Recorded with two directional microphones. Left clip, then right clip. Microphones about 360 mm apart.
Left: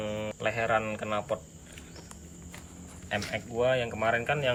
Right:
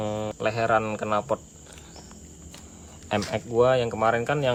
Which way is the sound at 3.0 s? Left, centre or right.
Centre.